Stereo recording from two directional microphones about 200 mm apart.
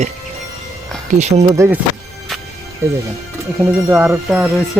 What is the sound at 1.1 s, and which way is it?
Speech, 35° right (ahead or behind).